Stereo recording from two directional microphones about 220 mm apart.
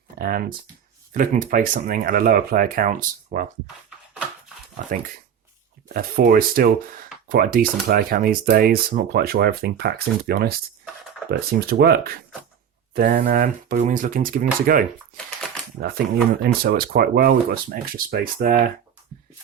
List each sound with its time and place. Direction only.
0.2 s speech: 40° right (ahead or behind)
3.8 s a sound: 5° right (ahead or behind)
5.9 s speech: 45° right (ahead or behind)
15.4 s typewriter: centre (ahead or behind)
16.4 s speech: 45° right (ahead or behind)